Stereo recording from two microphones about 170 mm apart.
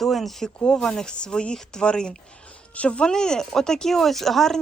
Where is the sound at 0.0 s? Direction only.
Centre (ahead or behind).